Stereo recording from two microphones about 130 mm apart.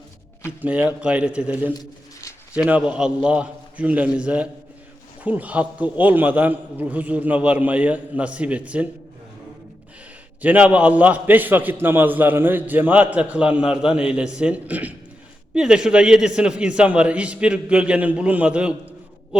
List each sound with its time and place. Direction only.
0.6 s a man's voice: 10° right (ahead or behind)
1.7 s a sound: 30° left (ahead or behind)
2.5 s a man's voice: 10° right (ahead or behind)
10.4 s a man's voice: 10° right (ahead or behind)